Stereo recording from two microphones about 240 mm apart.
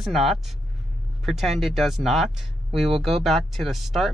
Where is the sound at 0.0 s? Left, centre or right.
Centre.